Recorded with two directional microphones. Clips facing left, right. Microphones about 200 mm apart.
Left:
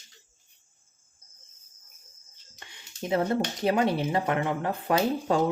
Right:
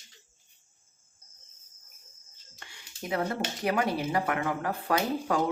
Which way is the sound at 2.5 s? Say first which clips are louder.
Left 3 dB; 20° left (ahead or behind).